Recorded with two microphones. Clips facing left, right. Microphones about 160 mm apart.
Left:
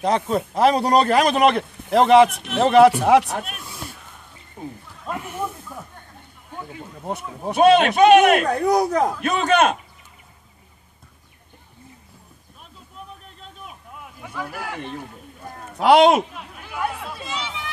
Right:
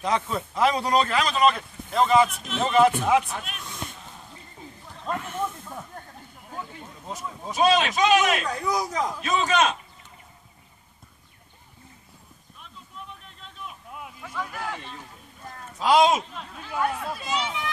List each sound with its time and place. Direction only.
0.0 s a man's voice: 35° left (ahead or behind); by 3.3 s 75° left (ahead or behind)
3.3 s speech: 50° left (ahead or behind)
3.6 s a sound: 5° left (ahead or behind)
4.6 s a sound: 55° left (ahead or behind)
5.0 s snake: 10° left (ahead or behind)
7.1 s a man's voice: 60° left (ahead or behind)
12.6 s vehicle: 40° left (ahead or behind)
14.5 s speech: 5° left (ahead or behind)
14.8 s a man's voice: 55° left (ahead or behind)
16.3 s a sound: 10° left (ahead or behind)